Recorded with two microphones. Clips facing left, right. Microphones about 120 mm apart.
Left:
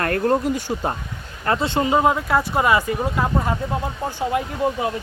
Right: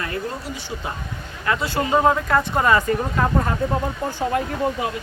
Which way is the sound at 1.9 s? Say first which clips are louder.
Right 2 dB; 10° left (ahead or behind).